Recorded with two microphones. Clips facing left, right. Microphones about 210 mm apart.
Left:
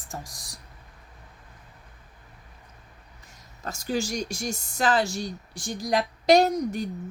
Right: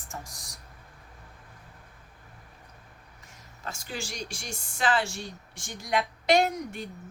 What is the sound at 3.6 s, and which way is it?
Speech, 40° left (ahead or behind).